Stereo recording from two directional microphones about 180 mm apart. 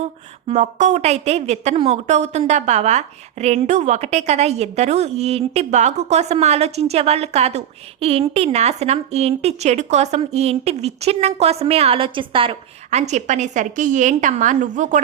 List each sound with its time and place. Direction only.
0.4 s speech: 40° right (ahead or behind)